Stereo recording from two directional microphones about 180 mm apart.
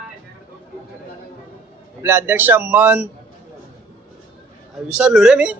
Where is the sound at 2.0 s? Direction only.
15° right (ahead or behind).